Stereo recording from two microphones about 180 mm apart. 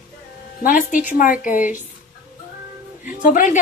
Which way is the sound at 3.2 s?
50° left (ahead or behind).